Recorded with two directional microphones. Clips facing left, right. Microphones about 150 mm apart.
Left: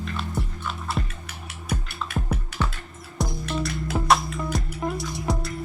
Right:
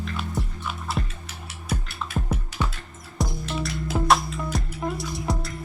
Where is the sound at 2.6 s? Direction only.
15° right (ahead or behind).